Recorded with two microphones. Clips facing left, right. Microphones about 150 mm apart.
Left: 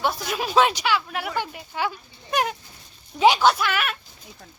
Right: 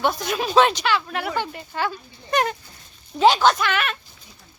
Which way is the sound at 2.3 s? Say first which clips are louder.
Right 2 dB; 5° left (ahead or behind).